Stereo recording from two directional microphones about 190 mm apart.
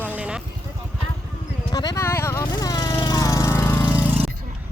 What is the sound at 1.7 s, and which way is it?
Speech, 20° left (ahead or behind).